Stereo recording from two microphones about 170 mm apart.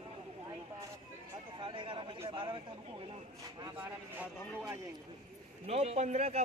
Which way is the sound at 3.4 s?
20° right (ahead or behind).